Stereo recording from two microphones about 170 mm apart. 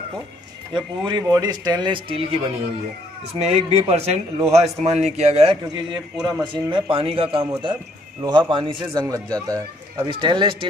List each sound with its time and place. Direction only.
0.7 s a man's voice: 25° right (ahead or behind)
3.3 s a man's voice: 35° right (ahead or behind)
6.2 s a man's voice: 20° right (ahead or behind)
6.7 s a man's voice: 35° right (ahead or behind)